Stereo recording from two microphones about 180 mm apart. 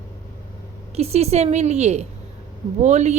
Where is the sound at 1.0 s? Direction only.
35° right (ahead or behind).